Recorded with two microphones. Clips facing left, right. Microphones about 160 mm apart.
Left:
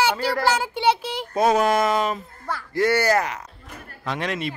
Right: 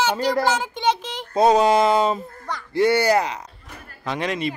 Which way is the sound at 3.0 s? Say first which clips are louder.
Right 2 dB; 15° right (ahead or behind).